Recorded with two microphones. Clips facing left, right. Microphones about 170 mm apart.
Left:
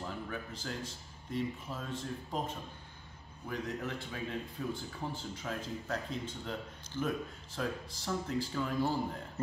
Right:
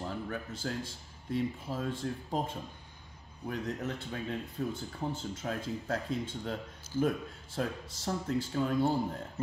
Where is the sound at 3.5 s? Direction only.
40° right (ahead or behind).